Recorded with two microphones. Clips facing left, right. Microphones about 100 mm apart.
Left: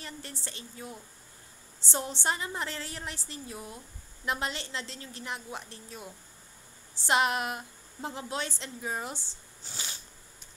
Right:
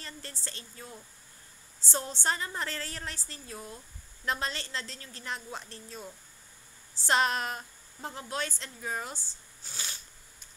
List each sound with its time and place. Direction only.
0.0 s a woman's voice: 20° left (ahead or behind)